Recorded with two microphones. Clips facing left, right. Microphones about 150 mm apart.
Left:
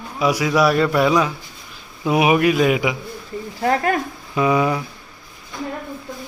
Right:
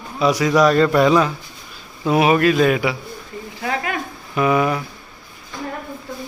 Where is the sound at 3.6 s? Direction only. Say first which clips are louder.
Left 6 dB; 45° left (ahead or behind).